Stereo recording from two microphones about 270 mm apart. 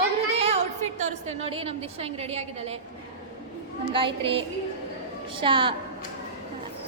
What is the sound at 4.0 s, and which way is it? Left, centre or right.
Speech, centre.